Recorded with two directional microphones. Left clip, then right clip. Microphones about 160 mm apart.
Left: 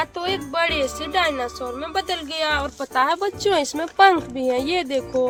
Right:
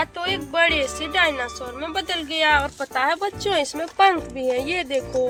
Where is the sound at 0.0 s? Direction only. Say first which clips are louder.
Even; 90° left.